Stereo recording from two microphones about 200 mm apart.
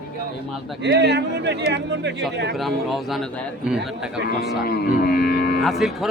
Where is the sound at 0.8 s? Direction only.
60° right (ahead or behind).